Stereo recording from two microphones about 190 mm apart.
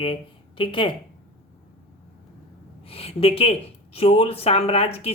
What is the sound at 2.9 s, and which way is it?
Speech, 30° left (ahead or behind).